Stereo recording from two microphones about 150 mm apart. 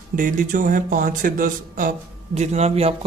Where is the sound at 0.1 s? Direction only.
65° right (ahead or behind).